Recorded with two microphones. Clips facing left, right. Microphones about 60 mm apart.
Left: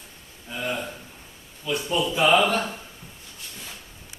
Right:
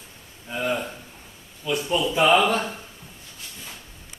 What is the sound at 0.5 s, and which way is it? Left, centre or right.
Speech, centre.